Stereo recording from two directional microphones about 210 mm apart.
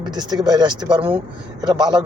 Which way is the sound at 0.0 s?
20° right (ahead or behind).